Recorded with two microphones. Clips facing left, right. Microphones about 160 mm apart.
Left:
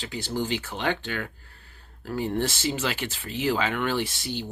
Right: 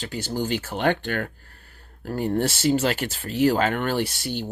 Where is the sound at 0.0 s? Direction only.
40° right (ahead or behind).